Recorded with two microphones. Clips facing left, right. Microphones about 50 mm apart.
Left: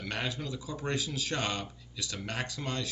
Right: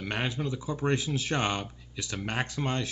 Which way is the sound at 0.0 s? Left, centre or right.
Right.